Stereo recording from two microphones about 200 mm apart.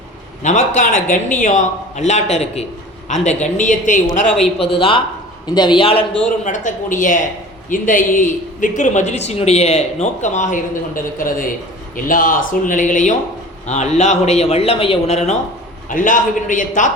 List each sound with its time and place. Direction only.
0.4 s a man's voice: 40° left (ahead or behind)
4.7 s a man's voice: 25° left (ahead or behind)
6.4 s a man's voice: 40° left (ahead or behind)